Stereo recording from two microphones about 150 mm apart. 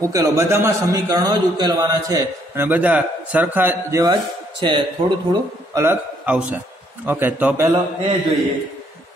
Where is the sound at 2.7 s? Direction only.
10° right (ahead or behind).